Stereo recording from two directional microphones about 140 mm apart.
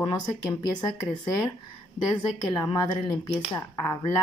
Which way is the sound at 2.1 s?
30° left (ahead or behind).